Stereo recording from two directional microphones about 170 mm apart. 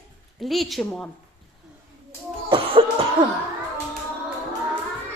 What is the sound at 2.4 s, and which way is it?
Cough, 30° right (ahead or behind).